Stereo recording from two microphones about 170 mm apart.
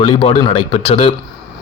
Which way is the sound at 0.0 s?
30° left (ahead or behind).